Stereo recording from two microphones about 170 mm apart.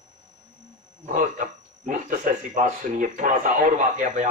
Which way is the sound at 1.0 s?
50° right (ahead or behind).